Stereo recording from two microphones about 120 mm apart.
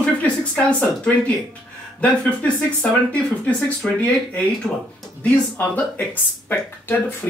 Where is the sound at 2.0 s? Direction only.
10° left (ahead or behind).